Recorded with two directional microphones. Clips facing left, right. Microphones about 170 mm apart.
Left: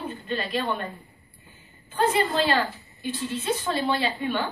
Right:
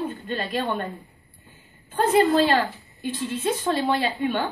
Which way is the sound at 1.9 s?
45° right (ahead or behind).